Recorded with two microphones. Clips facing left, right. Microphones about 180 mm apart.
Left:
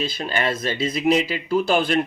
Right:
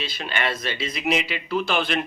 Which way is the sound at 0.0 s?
40° left (ahead or behind).